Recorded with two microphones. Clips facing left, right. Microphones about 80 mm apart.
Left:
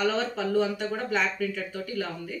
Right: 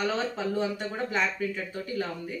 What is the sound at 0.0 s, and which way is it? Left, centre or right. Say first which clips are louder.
Speech: left 2 dB; centre.